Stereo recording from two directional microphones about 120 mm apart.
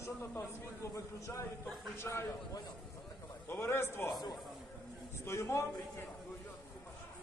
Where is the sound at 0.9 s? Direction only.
25° left (ahead or behind).